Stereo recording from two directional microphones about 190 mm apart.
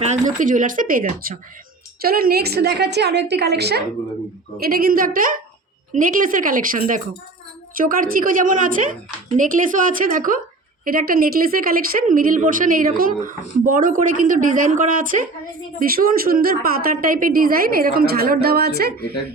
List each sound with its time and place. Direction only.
0.0 s a woman's voice: 40° right (ahead or behind); by 19.0 s 55° right (ahead or behind)